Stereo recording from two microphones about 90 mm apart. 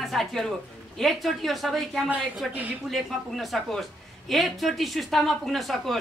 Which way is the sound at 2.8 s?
Centre (ahead or behind).